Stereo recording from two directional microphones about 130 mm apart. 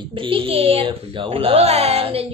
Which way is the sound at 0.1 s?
45° right (ahead or behind).